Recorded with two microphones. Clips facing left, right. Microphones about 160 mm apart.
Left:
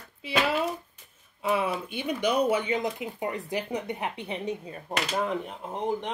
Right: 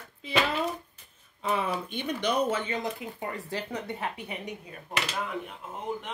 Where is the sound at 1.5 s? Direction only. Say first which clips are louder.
Left 2 dB; 10° left (ahead or behind); by 5.7 s 35° left (ahead or behind).